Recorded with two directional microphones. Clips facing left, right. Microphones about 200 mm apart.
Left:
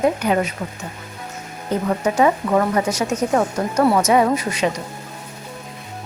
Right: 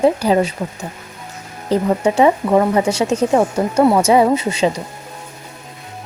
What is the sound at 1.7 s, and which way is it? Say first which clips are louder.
Speech: right 5 dB; 35° right (ahead or behind).